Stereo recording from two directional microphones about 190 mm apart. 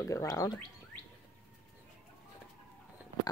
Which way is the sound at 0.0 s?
15° left (ahead or behind).